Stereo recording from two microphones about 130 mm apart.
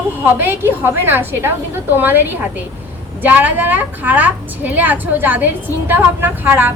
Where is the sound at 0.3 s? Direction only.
15° right (ahead or behind).